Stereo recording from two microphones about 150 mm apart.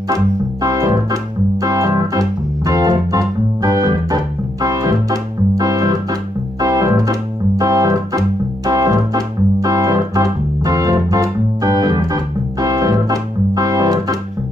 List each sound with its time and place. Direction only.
0.6 s organ: 25° right (ahead or behind)